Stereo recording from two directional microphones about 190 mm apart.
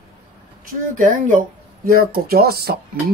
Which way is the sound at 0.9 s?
45° right (ahead or behind).